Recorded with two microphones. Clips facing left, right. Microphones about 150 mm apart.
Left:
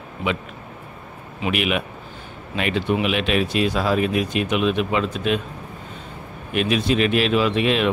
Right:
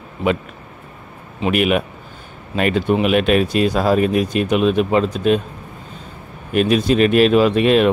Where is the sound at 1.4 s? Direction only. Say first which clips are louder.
Right 6 dB; 45° right (ahead or behind).